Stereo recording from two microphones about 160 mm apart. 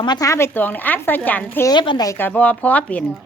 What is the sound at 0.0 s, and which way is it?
Speech, 25° left (ahead or behind).